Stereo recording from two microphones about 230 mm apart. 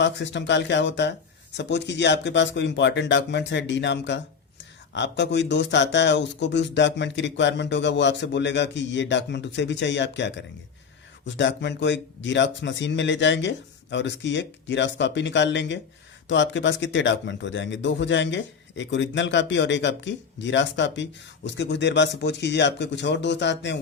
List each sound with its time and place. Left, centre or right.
0.0 s speech: left